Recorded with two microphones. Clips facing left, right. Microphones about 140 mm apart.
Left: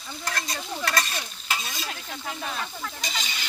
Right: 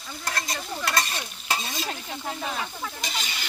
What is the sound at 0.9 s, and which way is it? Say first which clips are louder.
Stir: right 1 dB; 25° right (ahead or behind).